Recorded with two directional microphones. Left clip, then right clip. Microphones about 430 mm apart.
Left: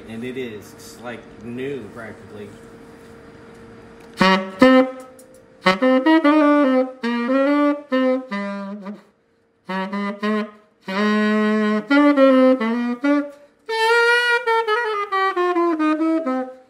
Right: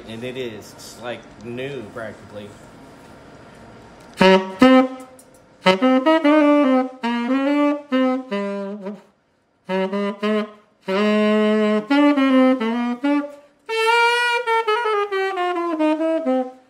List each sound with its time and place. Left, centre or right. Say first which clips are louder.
4.2 s music: right 1 dB; centre
5.6 s saxophone: even; centre
13.7 s music: left 1 dB; centre